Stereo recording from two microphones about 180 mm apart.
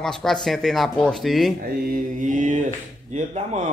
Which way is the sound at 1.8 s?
45° right (ahead or behind).